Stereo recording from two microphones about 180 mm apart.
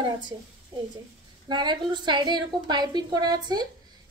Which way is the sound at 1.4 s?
25° right (ahead or behind).